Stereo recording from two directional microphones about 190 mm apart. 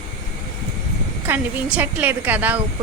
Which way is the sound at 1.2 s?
10° right (ahead or behind).